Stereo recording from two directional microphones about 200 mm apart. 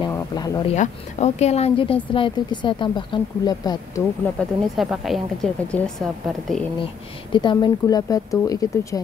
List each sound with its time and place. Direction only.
0.0 s a sound: 20° left (ahead or behind)
0.7 s speech: 35° left (ahead or behind)
4.4 s a woman's voice: 5° left (ahead or behind)
7.3 s speech: 20° left (ahead or behind)